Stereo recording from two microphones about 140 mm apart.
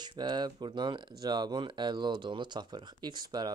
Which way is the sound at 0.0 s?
30° right (ahead or behind).